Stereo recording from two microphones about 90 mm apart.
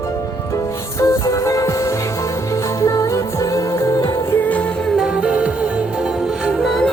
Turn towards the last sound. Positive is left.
turn(degrees=0)  # may be behind; listen again after turning